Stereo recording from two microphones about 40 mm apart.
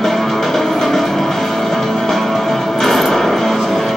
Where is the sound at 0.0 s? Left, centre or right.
Centre.